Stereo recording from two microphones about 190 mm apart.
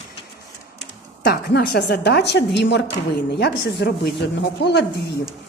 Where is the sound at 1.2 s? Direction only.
55° left (ahead or behind).